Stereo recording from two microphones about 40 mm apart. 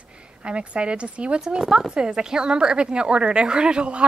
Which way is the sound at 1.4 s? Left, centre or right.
Centre.